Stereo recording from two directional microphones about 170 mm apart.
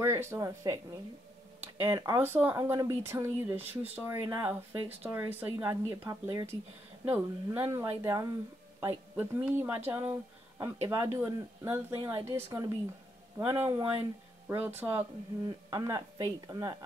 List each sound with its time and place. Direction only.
0.0 s speech: 15° right (ahead or behind)
1.8 s speech: 15° right (ahead or behind)